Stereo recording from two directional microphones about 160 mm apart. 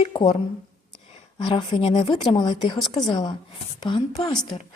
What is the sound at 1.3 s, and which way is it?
A woman's voice, 25° left (ahead or behind).